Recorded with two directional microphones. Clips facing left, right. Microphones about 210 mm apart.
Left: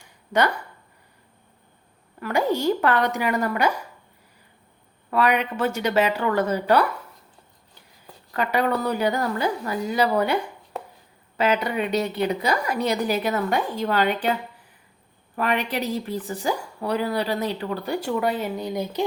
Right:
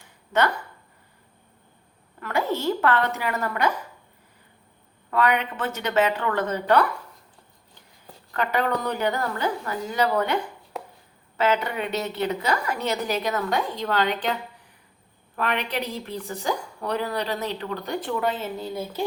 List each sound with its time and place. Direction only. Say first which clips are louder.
2.2 s speech: left 3 dB; 15° left (ahead or behind)
5.1 s speech: left 2 dB; 10° left (ahead or behind)
8.3 s speech: left 2 dB; 10° left (ahead or behind)
15.4 s speech: left 3 dB; 10° left (ahead or behind)